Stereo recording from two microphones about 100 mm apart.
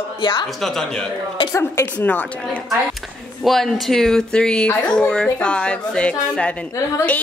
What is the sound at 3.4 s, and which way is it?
Speech, centre (ahead or behind).